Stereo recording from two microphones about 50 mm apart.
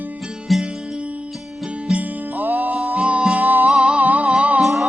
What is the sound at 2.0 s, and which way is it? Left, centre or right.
Music, right.